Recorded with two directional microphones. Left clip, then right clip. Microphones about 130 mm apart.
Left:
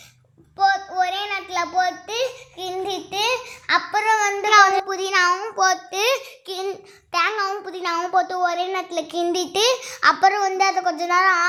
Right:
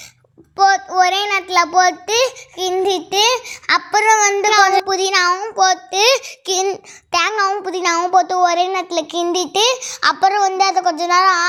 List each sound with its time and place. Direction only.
0.5 s a child's voice: 60° right (ahead or behind); by 5.3 s 40° right (ahead or behind)
5.3 s a child's voice: 15° right (ahead or behind)
5.5 s a child's voice: 30° right (ahead or behind)
6.4 s a sound: 60° right (ahead or behind)
7.1 s child singing: 60° right (ahead or behind)
7.6 s a child's voice: 50° right (ahead or behind)
8.1 s a child's voice: 35° right (ahead or behind); by 11.4 s 20° right (ahead or behind)